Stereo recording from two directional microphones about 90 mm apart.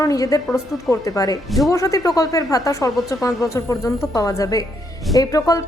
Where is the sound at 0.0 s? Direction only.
40° left (ahead or behind).